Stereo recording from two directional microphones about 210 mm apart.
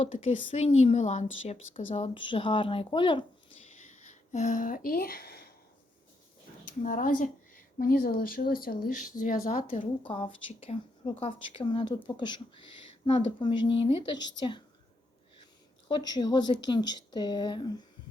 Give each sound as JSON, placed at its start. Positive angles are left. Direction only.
{"t": 0.0, "sound": "a woman's voice", "side_deg": 25}
{"t": 3.8, "sound": "speech", "side_deg": 35}
{"t": 6.7, "sound": "speech", "side_deg": 40}
{"t": 10.1, "sound": "a woman's voice", "side_deg": 25}
{"t": 15.9, "sound": "a woman's voice", "side_deg": 20}